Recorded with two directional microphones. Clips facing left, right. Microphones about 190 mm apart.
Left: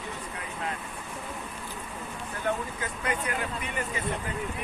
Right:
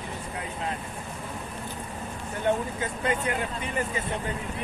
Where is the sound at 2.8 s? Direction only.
25° right (ahead or behind).